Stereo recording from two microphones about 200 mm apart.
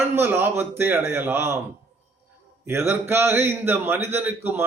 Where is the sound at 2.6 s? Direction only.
10° right (ahead or behind).